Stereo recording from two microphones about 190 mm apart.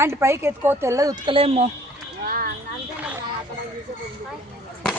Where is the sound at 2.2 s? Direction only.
50° right (ahead or behind).